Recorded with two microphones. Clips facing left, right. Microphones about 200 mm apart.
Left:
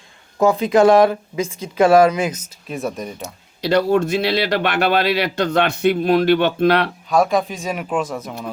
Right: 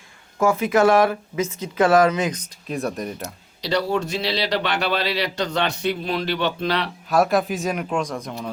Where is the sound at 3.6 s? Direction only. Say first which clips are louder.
Left 6 dB; 55° left (ahead or behind).